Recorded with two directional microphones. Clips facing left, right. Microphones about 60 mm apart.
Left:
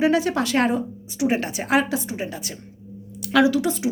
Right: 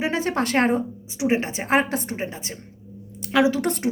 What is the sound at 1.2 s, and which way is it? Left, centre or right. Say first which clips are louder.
A woman's voice: even; right.